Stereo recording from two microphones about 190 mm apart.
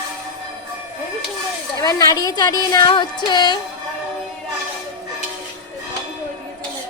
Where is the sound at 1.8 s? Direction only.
20° left (ahead or behind).